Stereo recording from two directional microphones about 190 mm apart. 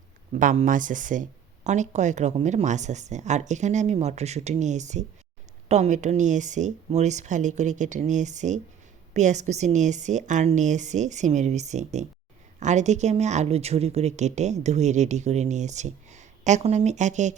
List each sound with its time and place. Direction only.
0.3 s a woman's voice: 40° right (ahead or behind)